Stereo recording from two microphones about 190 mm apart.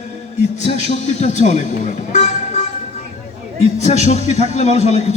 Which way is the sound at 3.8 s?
35° left (ahead or behind).